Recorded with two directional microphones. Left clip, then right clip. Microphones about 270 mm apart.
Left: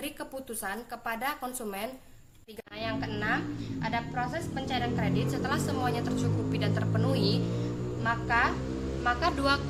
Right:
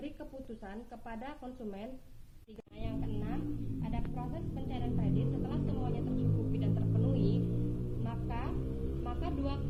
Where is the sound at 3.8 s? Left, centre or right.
Left.